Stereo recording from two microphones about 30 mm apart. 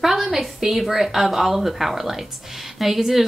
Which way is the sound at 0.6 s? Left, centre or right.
Centre.